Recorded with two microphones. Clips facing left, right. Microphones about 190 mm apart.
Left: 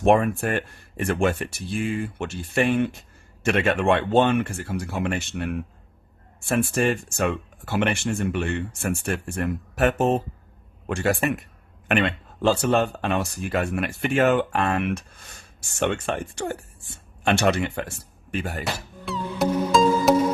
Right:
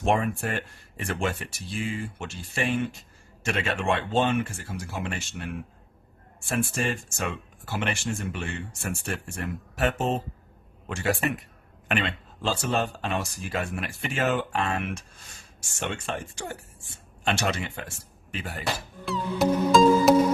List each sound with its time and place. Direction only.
0.0 s speech: 60° left (ahead or behind)
19.0 s music: centre (ahead or behind)